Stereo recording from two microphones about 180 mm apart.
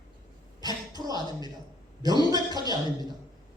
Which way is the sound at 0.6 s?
20° right (ahead or behind).